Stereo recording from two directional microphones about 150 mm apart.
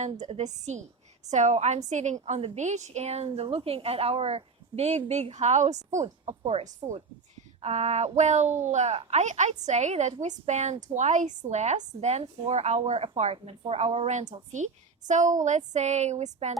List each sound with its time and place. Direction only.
0.2 s a woman's voice: 45° right (ahead or behind)